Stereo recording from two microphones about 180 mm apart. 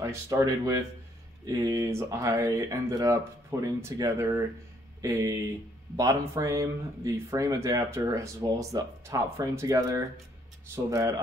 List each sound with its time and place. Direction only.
0.0 s speech: 20° right (ahead or behind)